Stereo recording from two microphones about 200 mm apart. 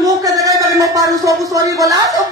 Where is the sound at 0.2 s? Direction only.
15° right (ahead or behind).